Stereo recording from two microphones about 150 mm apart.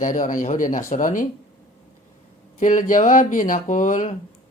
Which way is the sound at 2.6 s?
60° left (ahead or behind).